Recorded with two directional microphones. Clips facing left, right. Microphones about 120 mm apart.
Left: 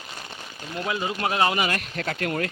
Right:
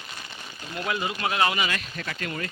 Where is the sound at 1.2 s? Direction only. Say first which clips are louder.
Left 3 dB; 35° left (ahead or behind).